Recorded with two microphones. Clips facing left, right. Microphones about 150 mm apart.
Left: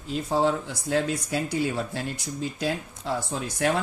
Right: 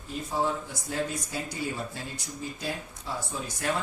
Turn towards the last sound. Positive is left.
turn(degrees=70)  # may be behind; listen again after turning